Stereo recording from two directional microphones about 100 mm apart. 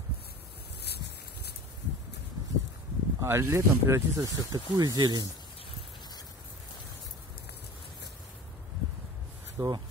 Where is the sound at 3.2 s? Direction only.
25° right (ahead or behind); by 5.3 s 45° right (ahead or behind).